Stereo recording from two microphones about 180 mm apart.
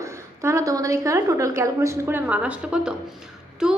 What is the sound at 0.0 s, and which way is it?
A woman's voice, 15° right (ahead or behind).